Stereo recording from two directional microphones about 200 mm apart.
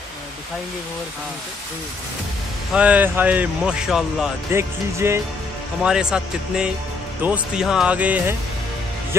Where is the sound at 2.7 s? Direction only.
5° right (ahead or behind).